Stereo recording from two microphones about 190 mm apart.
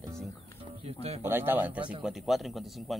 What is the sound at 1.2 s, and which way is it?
A man's voice, 10° right (ahead or behind).